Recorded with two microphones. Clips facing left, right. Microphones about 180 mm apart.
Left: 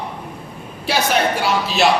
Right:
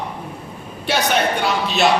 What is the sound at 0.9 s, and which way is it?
Speech, centre (ahead or behind).